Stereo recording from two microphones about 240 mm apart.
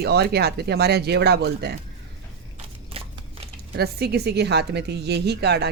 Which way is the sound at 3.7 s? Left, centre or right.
Right.